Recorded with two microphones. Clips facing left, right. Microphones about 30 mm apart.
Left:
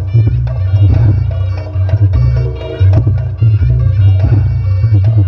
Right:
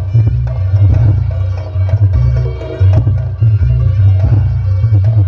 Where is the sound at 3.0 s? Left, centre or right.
Centre.